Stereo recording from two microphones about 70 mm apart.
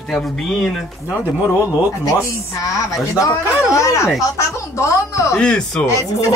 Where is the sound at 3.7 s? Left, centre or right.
Left.